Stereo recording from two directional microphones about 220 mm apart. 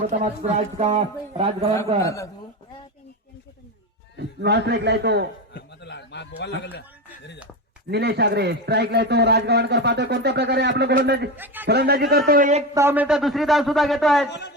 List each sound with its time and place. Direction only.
0.1 s speech: 30° right (ahead or behind)
2.0 s a man's voice: 15° left (ahead or behind)
4.2 s a man's voice: 50° right (ahead or behind)
5.5 s a man's voice: 50° left (ahead or behind)
7.9 s a man's voice: 45° right (ahead or behind)
11.3 s a man's voice: 10° right (ahead or behind)
11.7 s a man's voice: 45° right (ahead or behind)
12.7 s a man's voice: 10° right (ahead or behind)